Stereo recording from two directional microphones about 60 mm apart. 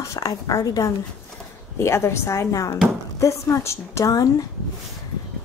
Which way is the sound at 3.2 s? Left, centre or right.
Left.